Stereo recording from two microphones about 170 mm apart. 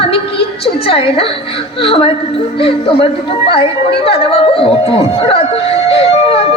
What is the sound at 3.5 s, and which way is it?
Music, 35° left (ahead or behind).